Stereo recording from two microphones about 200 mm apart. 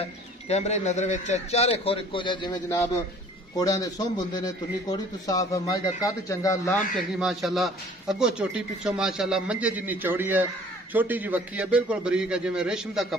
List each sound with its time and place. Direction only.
0.0 s a man's voice: 30° left (ahead or behind); by 6.7 s 15° left (ahead or behind)
7.2 s a man's voice: centre (ahead or behind)